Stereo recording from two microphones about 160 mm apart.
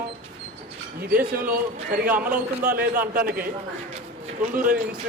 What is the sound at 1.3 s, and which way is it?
Speech, 60° right (ahead or behind).